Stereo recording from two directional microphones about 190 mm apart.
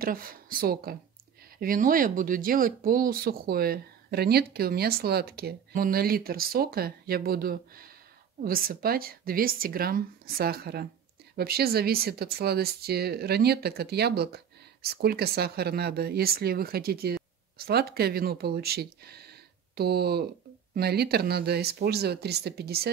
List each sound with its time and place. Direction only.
0.0 s speech: 50° right (ahead or behind)